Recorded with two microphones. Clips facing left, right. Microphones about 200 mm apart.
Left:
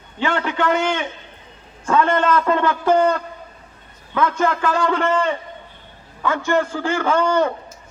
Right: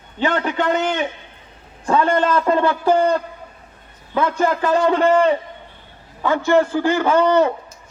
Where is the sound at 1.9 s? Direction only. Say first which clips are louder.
Even; 35° right (ahead or behind).